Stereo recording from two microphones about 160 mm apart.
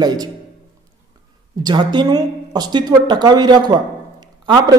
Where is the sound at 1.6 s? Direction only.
25° right (ahead or behind).